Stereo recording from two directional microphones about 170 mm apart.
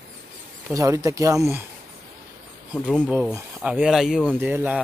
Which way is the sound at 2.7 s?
Centre (ahead or behind).